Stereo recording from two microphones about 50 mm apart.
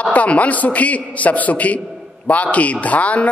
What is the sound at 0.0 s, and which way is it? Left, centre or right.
A man's voice, left.